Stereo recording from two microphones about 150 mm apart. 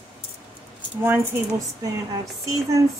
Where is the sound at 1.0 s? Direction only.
15° right (ahead or behind).